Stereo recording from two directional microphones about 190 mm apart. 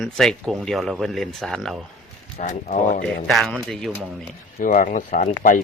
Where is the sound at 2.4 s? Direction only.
45° left (ahead or behind).